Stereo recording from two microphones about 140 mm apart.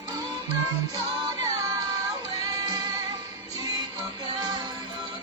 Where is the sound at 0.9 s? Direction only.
25° right (ahead or behind).